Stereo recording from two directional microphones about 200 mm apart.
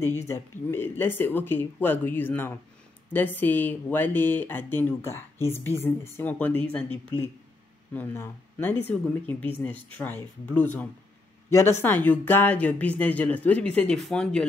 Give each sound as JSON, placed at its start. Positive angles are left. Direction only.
{"t": 0.0, "sound": "speech", "side_deg": 15}